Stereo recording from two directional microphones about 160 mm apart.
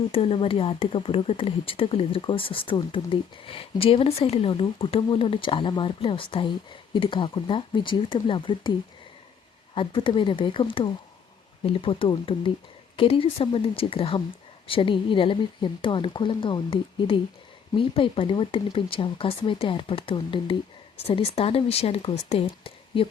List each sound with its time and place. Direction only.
0.1 s speech: 35° left (ahead or behind)
9.7 s speech: 35° left (ahead or behind)